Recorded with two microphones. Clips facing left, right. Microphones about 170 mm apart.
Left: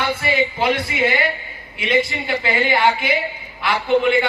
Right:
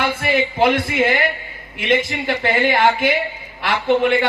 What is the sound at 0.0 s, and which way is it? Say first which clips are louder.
Speech: right 1 dB; 50° right (ahead or behind).